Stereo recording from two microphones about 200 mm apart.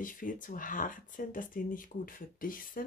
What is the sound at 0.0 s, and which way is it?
Speech, 40° left (ahead or behind).